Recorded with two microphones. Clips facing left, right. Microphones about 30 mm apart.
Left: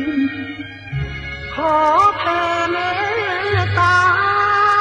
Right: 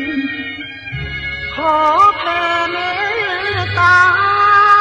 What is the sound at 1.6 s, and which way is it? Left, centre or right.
Music, right.